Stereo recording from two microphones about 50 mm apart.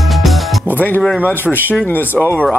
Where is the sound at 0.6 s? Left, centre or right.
Left.